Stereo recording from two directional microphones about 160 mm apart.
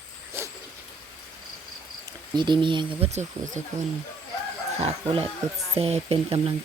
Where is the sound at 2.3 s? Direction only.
30° right (ahead or behind).